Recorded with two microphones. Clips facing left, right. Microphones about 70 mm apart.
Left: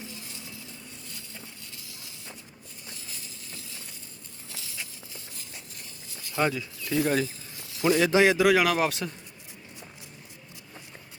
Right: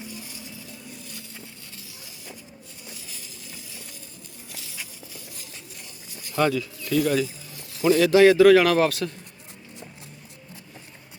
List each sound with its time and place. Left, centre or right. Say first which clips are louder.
0.1 s music: right 3 dB; centre
6.3 s speech: right 4 dB; centre
7.9 s a man's voice: right 5 dB; centre
8.9 s speech: right 4 dB; left